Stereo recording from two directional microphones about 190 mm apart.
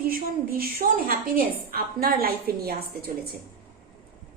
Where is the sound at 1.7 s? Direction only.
55° right (ahead or behind).